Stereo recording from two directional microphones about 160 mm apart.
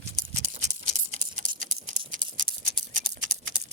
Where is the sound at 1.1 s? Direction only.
55° right (ahead or behind).